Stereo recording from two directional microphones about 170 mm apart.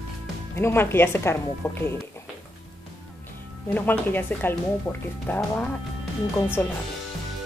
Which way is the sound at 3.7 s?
10° left (ahead or behind).